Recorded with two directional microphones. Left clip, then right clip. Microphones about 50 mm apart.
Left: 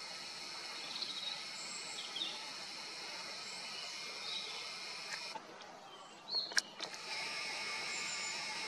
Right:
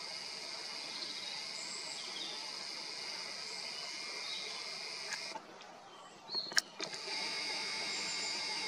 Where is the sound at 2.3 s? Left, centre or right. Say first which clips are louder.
Right 2 dB; right.